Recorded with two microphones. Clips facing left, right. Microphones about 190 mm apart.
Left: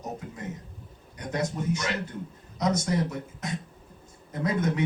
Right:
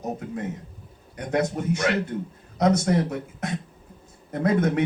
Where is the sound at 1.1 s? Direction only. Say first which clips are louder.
Right 6 dB; 60° right (ahead or behind).